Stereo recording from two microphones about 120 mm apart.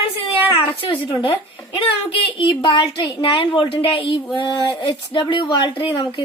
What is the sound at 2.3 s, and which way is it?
Speech, 45° left (ahead or behind).